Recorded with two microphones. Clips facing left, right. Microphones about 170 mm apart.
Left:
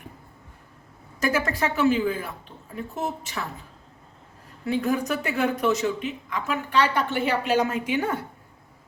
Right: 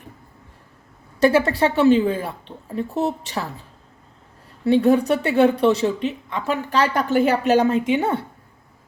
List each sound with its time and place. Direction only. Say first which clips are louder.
1.2 s speech: right 8 dB; 30° right (ahead or behind)
4.6 s speech: right 9 dB; 30° right (ahead or behind)